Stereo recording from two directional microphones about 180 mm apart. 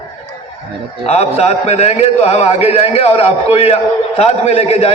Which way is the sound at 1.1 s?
35° left (ahead or behind).